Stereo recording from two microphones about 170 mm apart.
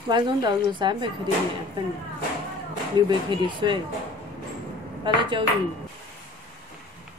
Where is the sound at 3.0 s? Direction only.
25° right (ahead or behind).